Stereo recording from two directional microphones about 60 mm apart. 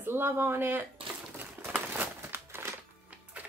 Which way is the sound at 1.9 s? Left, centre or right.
Right.